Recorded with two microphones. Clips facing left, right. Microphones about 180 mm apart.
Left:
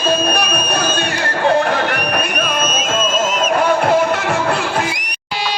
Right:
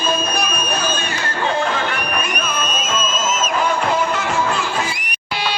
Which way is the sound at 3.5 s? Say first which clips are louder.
Left 6 dB; 60° left (ahead or behind).